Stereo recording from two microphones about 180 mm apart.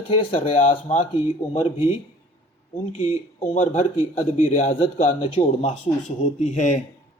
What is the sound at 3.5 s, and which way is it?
A man's voice, 40° left (ahead or behind).